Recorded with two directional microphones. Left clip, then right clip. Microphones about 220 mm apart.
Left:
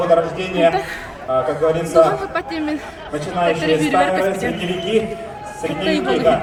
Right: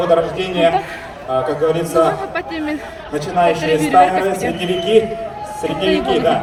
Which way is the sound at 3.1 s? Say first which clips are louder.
Right 3 dB; 50° right (ahead or behind).